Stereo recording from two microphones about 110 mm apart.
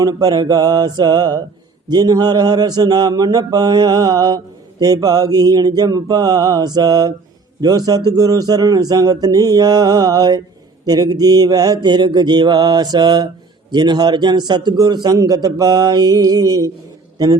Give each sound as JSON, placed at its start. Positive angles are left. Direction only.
{"t": 0.0, "sound": "mantra", "side_deg": -35}